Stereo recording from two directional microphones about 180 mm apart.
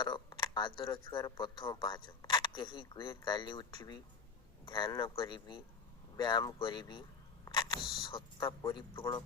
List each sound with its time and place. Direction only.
0.0 s a sound: 25° left (ahead or behind)
1.1 s a man's voice: 25° left (ahead or behind)
7.4 s single-lens reflex camera: 25° left (ahead or behind)
8.1 s a man's voice: 25° left (ahead or behind)